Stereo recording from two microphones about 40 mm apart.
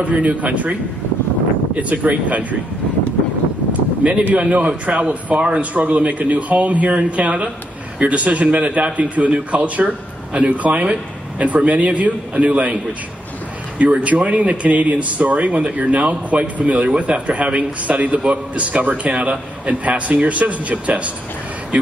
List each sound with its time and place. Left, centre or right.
0.0 s speech: right
1.8 s speech: right
4.4 s speech: right
13.7 s speech: right